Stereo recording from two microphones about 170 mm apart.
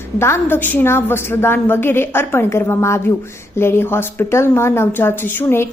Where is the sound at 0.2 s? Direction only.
15° left (ahead or behind).